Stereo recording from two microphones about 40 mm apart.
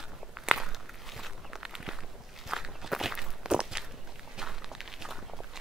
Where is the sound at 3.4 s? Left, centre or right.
Centre.